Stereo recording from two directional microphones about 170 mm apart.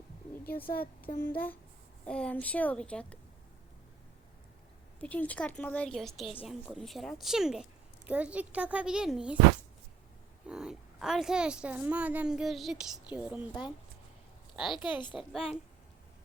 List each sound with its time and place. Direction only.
0.4 s a woman's voice: 10° left (ahead or behind)
4.9 s a woman's voice: 10° left (ahead or behind)
10.4 s speech: 5° right (ahead or behind)
13.5 s speech: 25° left (ahead or behind)
14.5 s a woman's voice: centre (ahead or behind)
14.9 s speech: 30° left (ahead or behind)
15.2 s speech: centre (ahead or behind)